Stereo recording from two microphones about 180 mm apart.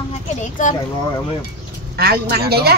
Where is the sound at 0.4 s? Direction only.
45° left (ahead or behind).